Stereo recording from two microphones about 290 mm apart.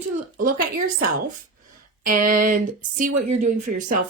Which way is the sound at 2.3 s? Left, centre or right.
Right.